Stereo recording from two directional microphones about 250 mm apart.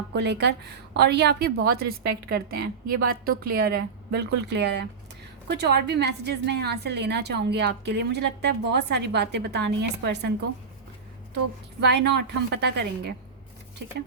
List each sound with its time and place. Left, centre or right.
0.2 s a woman's voice: right
11.8 s a woman's voice: right